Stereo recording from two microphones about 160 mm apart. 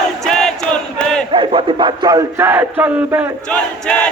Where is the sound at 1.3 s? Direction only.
35° right (ahead or behind); by 3.3 s 10° right (ahead or behind).